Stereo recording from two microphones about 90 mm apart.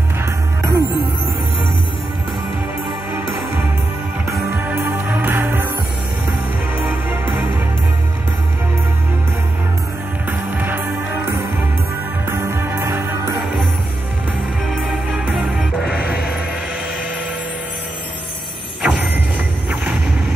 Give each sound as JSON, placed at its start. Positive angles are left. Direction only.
{"t": 0.2, "sound": "music", "side_deg": -30}
{"t": 3.1, "sound": "music", "side_deg": -25}
{"t": 4.6, "sound": "music", "side_deg": -25}
{"t": 6.8, "sound": "music", "side_deg": -20}
{"t": 10.6, "sound": "music", "side_deg": -20}
{"t": 12.3, "sound": "music", "side_deg": -30}
{"t": 14.8, "sound": "music", "side_deg": -10}
{"t": 18.8, "sound": "music", "side_deg": -15}